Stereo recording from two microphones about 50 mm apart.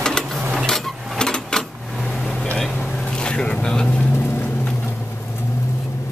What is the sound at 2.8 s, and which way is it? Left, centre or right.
Vehicle, centre.